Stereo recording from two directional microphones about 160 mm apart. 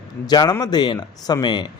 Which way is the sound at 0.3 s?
25° left (ahead or behind).